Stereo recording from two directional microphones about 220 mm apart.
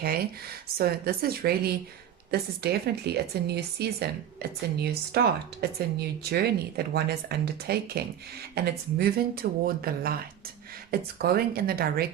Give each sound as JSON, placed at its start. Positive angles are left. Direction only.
{"t": 0.8, "sound": "speech", "side_deg": -45}
{"t": 11.2, "sound": "speech", "side_deg": -45}